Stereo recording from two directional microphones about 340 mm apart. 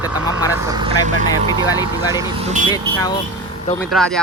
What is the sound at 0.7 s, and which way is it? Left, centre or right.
Speech, centre.